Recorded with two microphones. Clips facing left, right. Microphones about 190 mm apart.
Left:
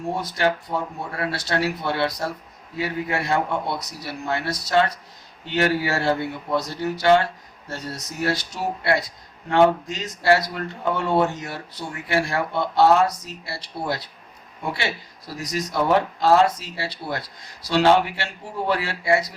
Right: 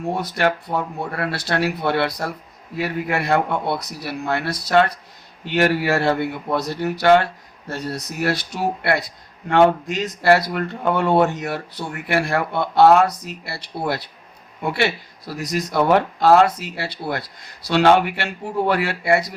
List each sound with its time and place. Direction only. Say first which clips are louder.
0.1 s speech: right 2 dB; 60° right (ahead or behind)